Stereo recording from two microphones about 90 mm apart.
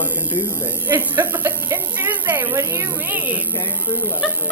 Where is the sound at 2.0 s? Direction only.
20° right (ahead or behind).